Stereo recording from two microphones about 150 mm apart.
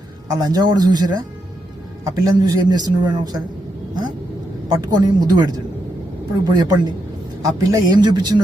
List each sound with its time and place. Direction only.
0.3 s a man's voice: 25° right (ahead or behind)
4.7 s a man's voice: 25° right (ahead or behind)